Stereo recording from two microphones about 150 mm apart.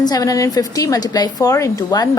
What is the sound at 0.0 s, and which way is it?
A woman's voice, 25° left (ahead or behind).